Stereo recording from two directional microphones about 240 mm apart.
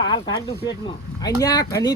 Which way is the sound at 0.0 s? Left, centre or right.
Centre.